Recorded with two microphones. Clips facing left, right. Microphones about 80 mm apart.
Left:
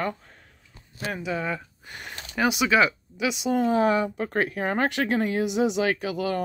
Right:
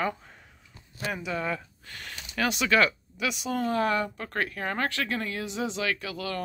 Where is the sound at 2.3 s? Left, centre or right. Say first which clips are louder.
Left 3 dB; centre.